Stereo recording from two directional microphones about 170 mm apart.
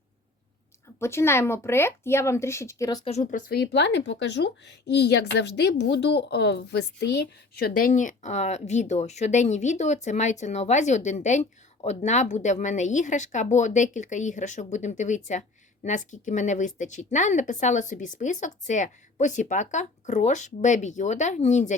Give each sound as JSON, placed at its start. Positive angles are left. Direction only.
{"t": 0.9, "sound": "speech", "side_deg": 15}
{"t": 3.0, "sound": "speech", "side_deg": 40}
{"t": 3.5, "sound": "speech", "side_deg": 85}